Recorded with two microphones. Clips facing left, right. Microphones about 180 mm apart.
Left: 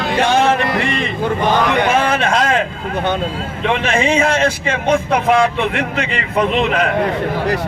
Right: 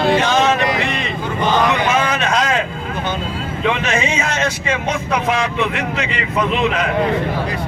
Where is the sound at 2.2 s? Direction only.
55° left (ahead or behind).